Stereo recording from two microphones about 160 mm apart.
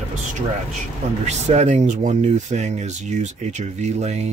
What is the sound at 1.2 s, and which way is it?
Speech, 45° right (ahead or behind).